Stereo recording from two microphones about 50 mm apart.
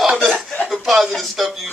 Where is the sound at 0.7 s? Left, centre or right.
Centre.